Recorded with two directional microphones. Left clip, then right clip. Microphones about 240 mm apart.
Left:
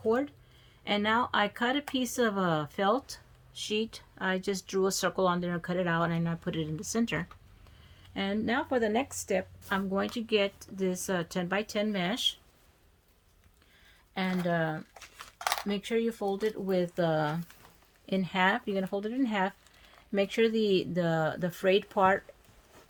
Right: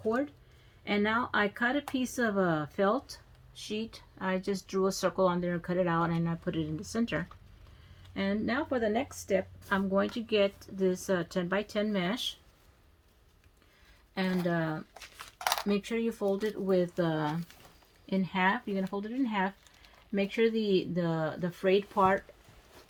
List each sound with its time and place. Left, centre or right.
0.9 s speech: left
14.2 s speech: left
14.9 s a sound: centre
15.8 s speech: left